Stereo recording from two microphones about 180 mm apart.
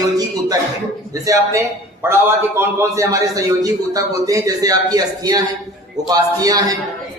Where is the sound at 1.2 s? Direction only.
15° right (ahead or behind).